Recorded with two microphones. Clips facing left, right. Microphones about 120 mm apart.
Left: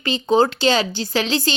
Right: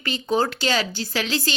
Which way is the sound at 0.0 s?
25° left (ahead or behind).